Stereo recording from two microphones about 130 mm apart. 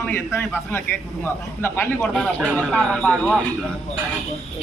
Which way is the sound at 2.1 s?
5° left (ahead or behind).